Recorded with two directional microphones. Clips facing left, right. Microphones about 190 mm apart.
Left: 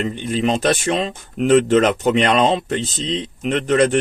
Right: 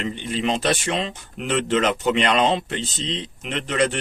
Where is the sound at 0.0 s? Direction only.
45° left (ahead or behind).